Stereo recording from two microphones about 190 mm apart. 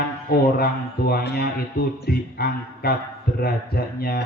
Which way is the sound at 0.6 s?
55° left (ahead or behind).